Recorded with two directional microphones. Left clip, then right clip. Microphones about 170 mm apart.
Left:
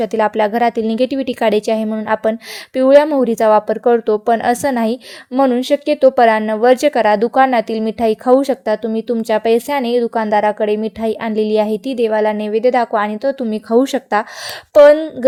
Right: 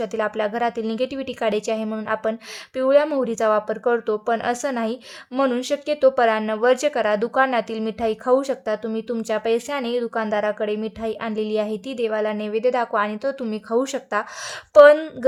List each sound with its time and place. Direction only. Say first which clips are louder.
0.0 s a woman's voice: left 8 dB; 30° left (ahead or behind)